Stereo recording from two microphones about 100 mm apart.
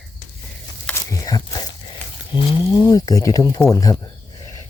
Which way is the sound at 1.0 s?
35° left (ahead or behind).